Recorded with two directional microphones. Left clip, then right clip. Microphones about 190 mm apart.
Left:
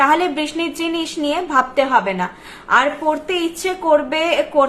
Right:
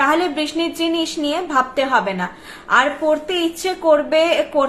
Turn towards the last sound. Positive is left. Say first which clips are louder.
# even
turn(degrees=5)  # may be behind; listen again after turning